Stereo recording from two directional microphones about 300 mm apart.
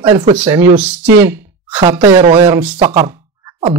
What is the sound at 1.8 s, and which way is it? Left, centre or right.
Speech, centre.